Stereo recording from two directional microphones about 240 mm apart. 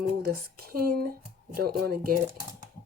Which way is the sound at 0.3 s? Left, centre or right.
Right.